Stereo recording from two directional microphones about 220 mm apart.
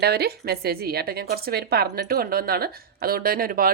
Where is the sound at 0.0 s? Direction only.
45° right (ahead or behind).